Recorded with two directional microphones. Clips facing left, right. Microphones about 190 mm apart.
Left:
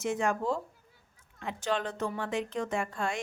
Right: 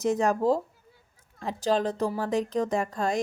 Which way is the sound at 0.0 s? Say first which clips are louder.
Right 6 dB; 40° right (ahead or behind).